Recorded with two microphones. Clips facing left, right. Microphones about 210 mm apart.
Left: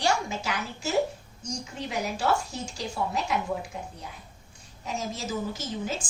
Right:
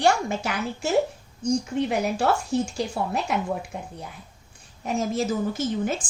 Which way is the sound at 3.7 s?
55° right (ahead or behind).